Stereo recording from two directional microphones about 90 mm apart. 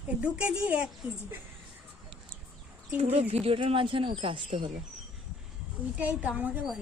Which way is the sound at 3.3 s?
85° right.